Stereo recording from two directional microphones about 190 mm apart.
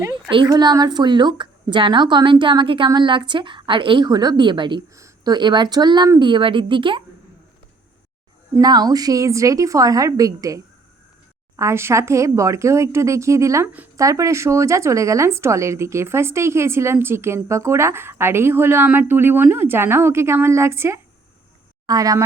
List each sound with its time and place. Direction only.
0.0 s a woman's voice: 25° right (ahead or behind)
8.5 s a woman's voice: 20° right (ahead or behind)